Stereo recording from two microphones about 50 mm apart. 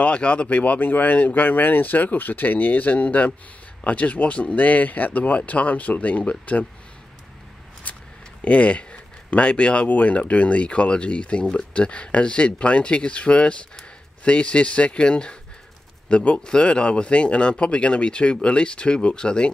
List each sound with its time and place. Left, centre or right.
0.0 s speech: left
7.8 s a sound: left
8.5 s speech: left